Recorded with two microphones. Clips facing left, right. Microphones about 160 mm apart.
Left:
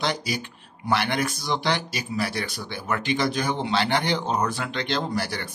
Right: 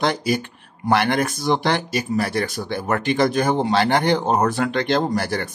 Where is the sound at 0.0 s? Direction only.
50° right (ahead or behind).